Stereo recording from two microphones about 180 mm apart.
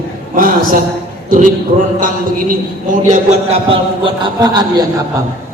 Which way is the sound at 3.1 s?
35° right (ahead or behind).